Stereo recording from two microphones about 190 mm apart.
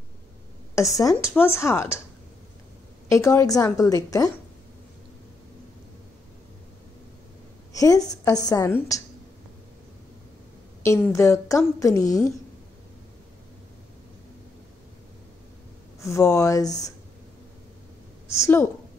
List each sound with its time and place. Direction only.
0.7 s a woman's voice: 15° left (ahead or behind)
3.1 s a woman's voice: 15° left (ahead or behind)
7.7 s a woman's voice: 20° left (ahead or behind)
11.0 s a woman's voice: 15° left (ahead or behind)
16.0 s a woman's voice: 15° left (ahead or behind)
18.4 s a woman's voice: 10° left (ahead or behind)